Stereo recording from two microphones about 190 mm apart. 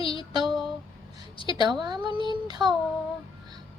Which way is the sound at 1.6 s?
20° right (ahead or behind).